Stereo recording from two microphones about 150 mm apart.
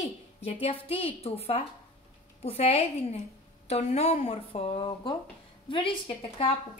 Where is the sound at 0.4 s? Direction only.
40° left (ahead or behind).